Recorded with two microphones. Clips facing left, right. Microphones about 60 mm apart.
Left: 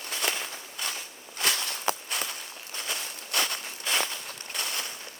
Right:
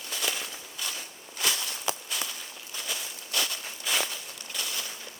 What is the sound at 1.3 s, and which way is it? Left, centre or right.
Walk, left.